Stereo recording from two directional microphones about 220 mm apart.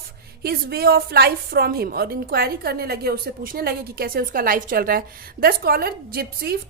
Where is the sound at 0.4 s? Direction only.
45° right (ahead or behind).